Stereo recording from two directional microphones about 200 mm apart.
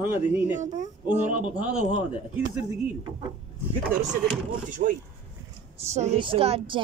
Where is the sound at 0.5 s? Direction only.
35° right (ahead or behind).